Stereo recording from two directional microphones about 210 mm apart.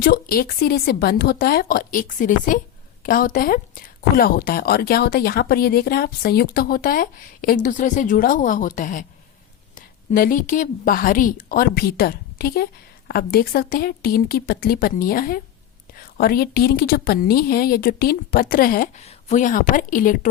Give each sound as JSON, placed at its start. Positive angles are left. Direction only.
{"t": 0.0, "sound": "a woman's voice", "side_deg": 45}